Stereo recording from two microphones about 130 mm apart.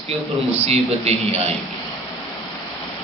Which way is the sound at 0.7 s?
55° right (ahead or behind).